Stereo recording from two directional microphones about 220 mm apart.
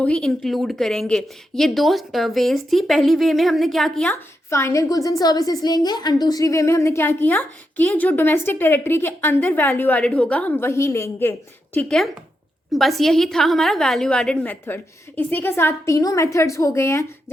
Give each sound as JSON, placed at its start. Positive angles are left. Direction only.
{"t": 0.0, "sound": "a woman's voice", "side_deg": 5}
{"t": 4.1, "sound": "a woman's voice", "side_deg": 10}